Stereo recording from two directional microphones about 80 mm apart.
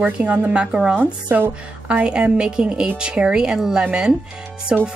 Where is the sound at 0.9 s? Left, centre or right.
Right.